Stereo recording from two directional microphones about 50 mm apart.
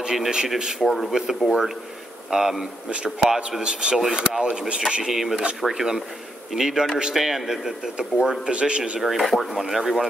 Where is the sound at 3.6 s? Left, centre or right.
Centre.